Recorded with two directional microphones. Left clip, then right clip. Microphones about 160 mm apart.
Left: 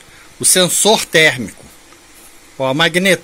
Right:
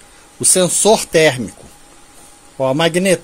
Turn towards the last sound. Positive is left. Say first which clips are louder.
# left 1 dB
turn(degrees=-10)  # may be behind; listen again after turning